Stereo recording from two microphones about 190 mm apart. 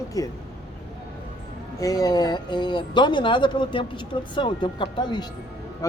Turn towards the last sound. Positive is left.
turn(degrees=15)  # may be behind; listen again after turning